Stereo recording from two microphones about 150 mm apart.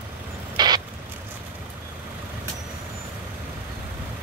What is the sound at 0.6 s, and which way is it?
Vehicle, 30° right (ahead or behind).